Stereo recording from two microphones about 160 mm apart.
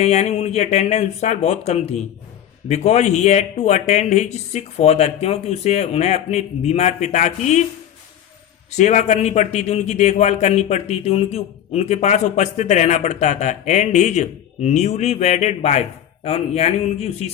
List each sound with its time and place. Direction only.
0.0 s a man's voice: 45° left (ahead or behind)
8.7 s a man's voice: 50° left (ahead or behind)